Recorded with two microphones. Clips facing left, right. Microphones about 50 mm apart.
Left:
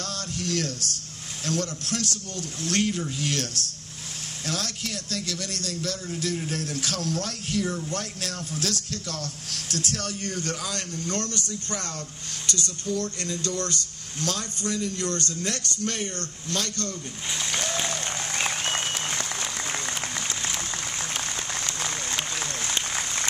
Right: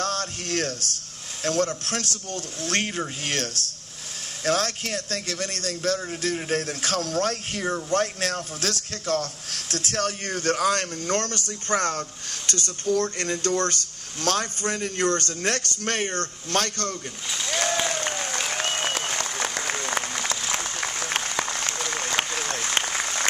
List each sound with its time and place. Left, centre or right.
0.0 s a sound: right
1.4 s a man's voice: right
4.5 s a man's voice: right
17.5 s applause: right